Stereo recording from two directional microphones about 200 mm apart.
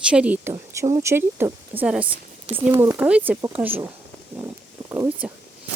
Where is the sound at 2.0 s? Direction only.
25° right (ahead or behind).